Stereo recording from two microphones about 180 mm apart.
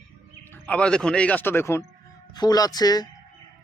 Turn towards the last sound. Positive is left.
turn(degrees=20)  # may be behind; listen again after turning